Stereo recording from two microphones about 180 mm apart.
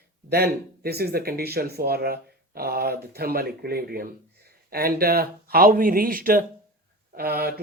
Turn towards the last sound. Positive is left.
turn(degrees=-60)  # may be behind; listen again after turning